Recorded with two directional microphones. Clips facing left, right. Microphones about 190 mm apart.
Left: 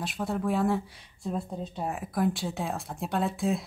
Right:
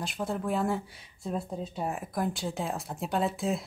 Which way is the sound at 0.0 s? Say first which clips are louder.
Left 2 dB; centre (ahead or behind).